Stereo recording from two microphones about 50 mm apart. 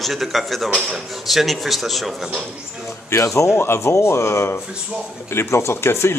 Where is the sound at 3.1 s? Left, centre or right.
Left.